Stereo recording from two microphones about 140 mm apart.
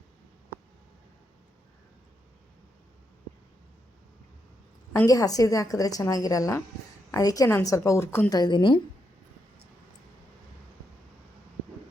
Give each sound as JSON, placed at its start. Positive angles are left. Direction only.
{"t": 4.9, "sound": "a woman's voice", "side_deg": 25}
{"t": 8.4, "sound": "a woman's voice", "side_deg": 35}